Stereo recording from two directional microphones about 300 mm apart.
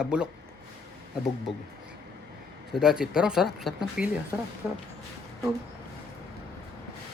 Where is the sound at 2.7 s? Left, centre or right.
Centre.